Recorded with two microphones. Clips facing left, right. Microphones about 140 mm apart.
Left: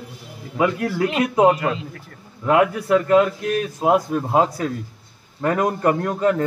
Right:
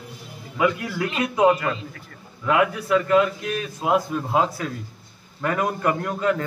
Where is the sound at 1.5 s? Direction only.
20° left (ahead or behind).